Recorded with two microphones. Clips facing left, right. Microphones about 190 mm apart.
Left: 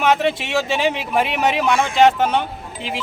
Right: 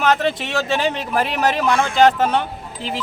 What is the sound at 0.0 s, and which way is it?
A man's voice, centre (ahead or behind).